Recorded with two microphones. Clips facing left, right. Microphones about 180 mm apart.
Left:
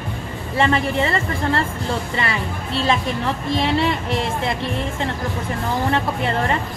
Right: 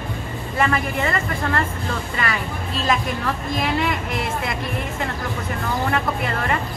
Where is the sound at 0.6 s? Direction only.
25° left (ahead or behind).